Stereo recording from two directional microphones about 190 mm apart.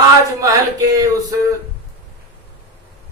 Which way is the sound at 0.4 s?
15° right (ahead or behind).